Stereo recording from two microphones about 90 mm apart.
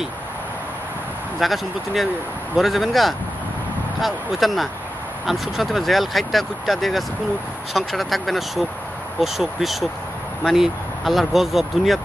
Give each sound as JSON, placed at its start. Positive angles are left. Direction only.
{"t": 1.4, "sound": "speech", "side_deg": 0}